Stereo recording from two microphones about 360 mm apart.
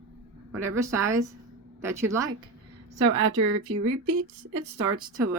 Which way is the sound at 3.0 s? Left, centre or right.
Right.